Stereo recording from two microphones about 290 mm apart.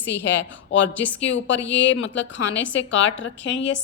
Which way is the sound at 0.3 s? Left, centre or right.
Left.